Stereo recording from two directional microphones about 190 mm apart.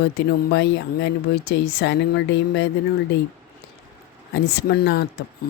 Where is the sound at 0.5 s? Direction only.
60° left (ahead or behind).